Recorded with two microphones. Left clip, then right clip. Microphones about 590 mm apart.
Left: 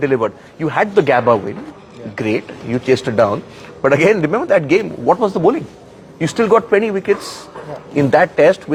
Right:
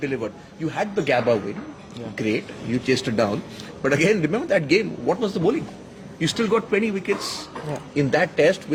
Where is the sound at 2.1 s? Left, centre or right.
Centre.